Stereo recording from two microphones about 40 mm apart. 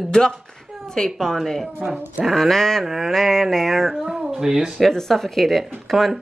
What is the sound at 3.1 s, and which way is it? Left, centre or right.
Speech, centre.